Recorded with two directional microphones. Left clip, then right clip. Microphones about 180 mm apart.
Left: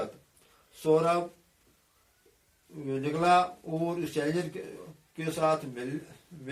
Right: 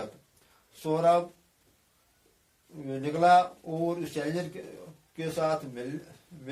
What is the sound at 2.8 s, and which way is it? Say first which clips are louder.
A man's voice: right 3 dB; 10° right (ahead or behind).